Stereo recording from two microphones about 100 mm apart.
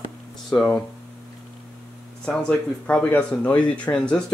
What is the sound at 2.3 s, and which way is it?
Speech, 10° left (ahead or behind).